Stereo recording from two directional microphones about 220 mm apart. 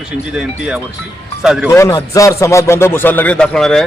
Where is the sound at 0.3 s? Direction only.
Centre (ahead or behind).